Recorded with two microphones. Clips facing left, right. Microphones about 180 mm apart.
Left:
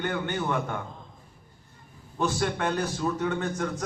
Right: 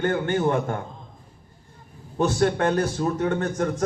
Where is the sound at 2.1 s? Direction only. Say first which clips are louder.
Right 6 dB; 45° right (ahead or behind).